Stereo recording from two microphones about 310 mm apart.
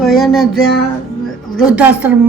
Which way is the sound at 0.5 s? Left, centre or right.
Left.